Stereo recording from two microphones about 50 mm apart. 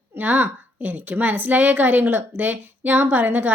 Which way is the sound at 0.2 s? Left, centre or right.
Right.